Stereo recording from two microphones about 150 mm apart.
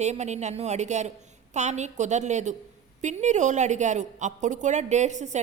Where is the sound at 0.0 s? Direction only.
50° right (ahead or behind).